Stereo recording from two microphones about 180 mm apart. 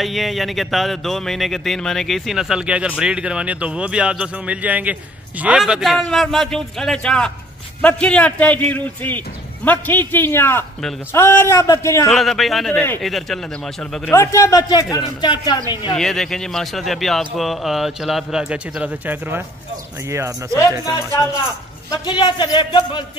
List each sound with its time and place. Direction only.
0.0 s a man's voice: centre (ahead or behind); by 12.1 s 15° left (ahead or behind)
12.1 s speech: centre (ahead or behind)
14.1 s a man's voice: 15° left (ahead or behind)
15.9 s a man's voice: centre (ahead or behind); by 20.5 s 15° right (ahead or behind)
21.9 s a man's voice: 25° left (ahead or behind)